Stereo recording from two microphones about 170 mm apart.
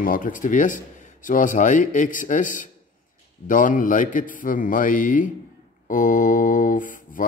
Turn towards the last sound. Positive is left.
turn(degrees=50)  # may be behind; listen again after turning